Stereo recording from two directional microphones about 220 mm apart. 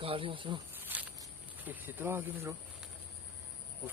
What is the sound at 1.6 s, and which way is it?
Speech, 10° right (ahead or behind).